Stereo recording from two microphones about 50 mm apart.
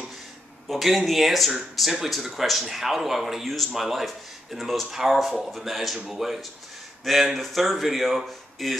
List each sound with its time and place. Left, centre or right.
0.7 s speech: centre